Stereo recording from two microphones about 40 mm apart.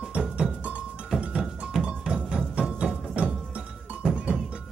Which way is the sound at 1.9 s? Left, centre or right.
Centre.